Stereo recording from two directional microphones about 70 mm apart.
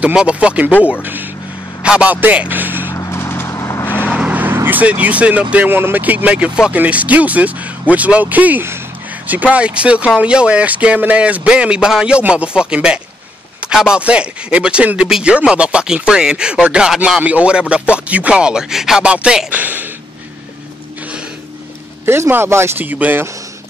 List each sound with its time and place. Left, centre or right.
0.0 s speech: centre
1.8 s a man's voice: centre
2.9 s a sound: left
3.5 s vehicle: left
4.2 s vehicle: right
4.6 s speech: right
5.7 s speech: right; by 17.2 s centre
17.2 s speech: centre
19.6 s a sound: right
22.0 s speech: right
22.8 s speech: right